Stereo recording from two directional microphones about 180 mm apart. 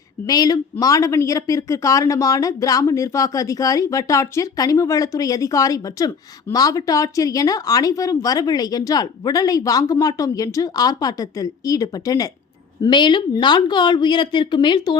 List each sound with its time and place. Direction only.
0.3 s speech: 20° left (ahead or behind)